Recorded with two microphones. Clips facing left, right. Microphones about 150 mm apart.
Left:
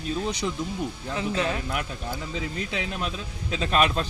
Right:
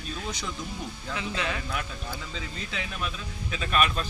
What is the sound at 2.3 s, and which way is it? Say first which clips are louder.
Speech: left 6 dB; 15° left (ahead or behind).